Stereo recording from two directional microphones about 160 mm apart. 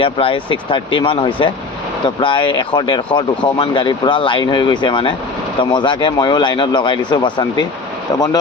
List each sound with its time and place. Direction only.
0.0 s speech: 35° left (ahead or behind)